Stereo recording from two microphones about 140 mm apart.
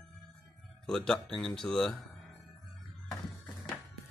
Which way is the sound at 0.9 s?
5° left (ahead or behind).